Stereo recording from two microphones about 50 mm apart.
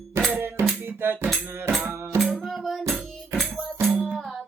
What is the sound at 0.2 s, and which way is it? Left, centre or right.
Music, right.